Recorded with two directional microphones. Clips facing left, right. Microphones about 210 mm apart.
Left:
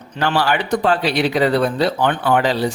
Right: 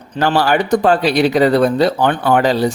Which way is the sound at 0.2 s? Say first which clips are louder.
Right 4 dB; 40° right (ahead or behind).